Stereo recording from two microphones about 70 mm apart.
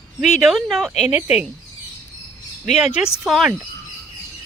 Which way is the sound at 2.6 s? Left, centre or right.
Centre.